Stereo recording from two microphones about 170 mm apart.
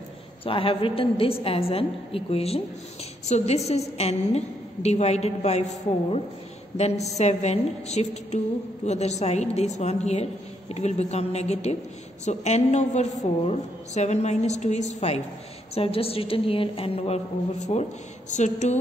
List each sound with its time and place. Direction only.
0.5 s a woman's voice: 30° left (ahead or behind)